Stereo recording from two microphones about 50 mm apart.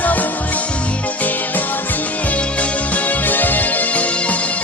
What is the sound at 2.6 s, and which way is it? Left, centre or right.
Music, left.